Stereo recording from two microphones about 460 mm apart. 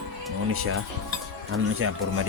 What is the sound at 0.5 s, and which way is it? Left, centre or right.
Speech, right.